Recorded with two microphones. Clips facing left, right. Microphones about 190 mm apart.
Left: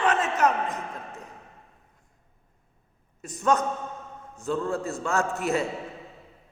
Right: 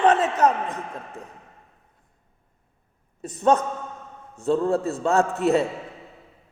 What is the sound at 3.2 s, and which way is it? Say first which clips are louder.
A man's voice: right 4 dB; 30° right (ahead or behind).